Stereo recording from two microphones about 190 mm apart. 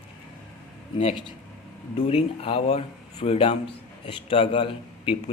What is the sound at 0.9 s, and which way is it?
A man's voice, 30° left (ahead or behind).